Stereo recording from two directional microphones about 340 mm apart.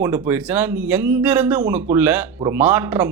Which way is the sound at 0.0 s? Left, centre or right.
Centre.